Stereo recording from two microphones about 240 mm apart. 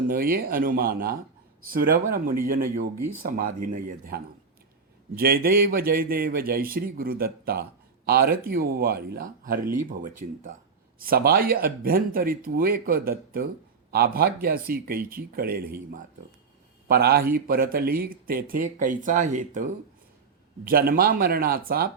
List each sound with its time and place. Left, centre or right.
0.1 s a man's voice: right
20.7 s a man's voice: right